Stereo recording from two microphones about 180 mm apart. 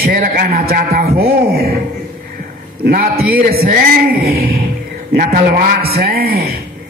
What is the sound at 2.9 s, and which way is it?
A man's voice, 55° right (ahead or behind).